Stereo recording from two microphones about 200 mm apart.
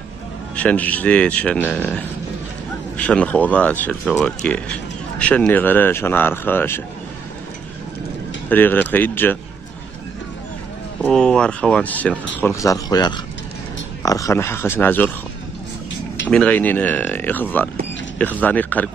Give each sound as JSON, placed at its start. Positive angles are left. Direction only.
{"t": 0.6, "sound": "speech", "side_deg": 5}
{"t": 8.5, "sound": "speech", "side_deg": 10}
{"t": 11.0, "sound": "speech", "side_deg": 5}
{"t": 16.3, "sound": "speech", "side_deg": 5}